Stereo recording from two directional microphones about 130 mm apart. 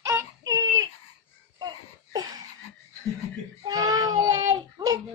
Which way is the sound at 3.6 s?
30° right (ahead or behind).